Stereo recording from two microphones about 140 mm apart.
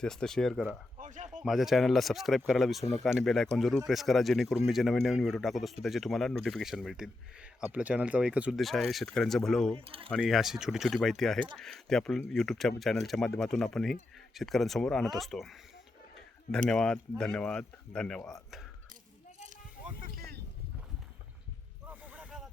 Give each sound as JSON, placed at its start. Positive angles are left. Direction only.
{"t": 0.0, "sound": "speech", "side_deg": 5}
{"t": 0.9, "sound": "a sound", "side_deg": -65}
{"t": 1.4, "sound": "speech", "side_deg": -5}
{"t": 9.7, "sound": "speech", "side_deg": -40}
{"t": 10.2, "sound": "speech", "side_deg": 0}
{"t": 16.6, "sound": "speech", "side_deg": 5}
{"t": 21.8, "sound": "a sound", "side_deg": -10}